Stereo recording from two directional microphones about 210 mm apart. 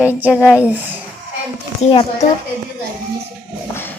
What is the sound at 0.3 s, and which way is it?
Speech, 10° left (ahead or behind).